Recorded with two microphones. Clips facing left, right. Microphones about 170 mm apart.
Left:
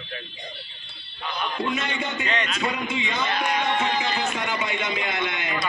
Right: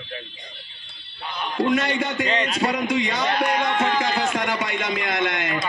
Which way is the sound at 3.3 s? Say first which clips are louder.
Right 2 dB; 50° right (ahead or behind).